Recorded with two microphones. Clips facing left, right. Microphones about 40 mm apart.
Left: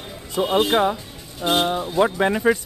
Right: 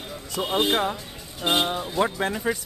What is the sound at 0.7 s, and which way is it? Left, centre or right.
Speech, centre.